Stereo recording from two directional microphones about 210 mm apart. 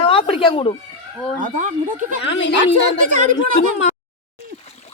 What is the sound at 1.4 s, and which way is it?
Speech, 40° right (ahead or behind).